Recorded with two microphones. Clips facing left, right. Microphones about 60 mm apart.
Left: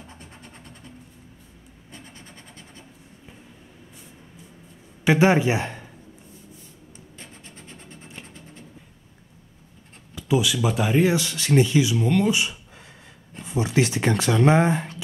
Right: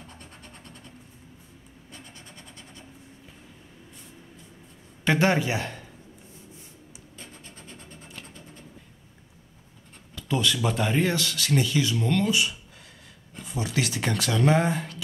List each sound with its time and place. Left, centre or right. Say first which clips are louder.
0.0 s a sound: left 2 dB; centre
1.9 s train: left 2 dB; left
5.0 s speech: left 5 dB; centre
7.2 s a sound: even; left
10.1 s speech: left 4 dB; centre
11.1 s speech: left 5 dB; left
11.8 s speech: left 4 dB; centre
12.3 s speech: left 2 dB; left